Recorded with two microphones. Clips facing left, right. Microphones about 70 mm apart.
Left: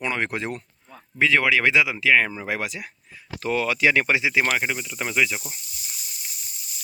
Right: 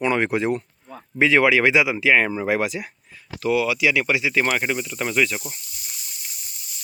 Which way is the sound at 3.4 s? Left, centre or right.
Left.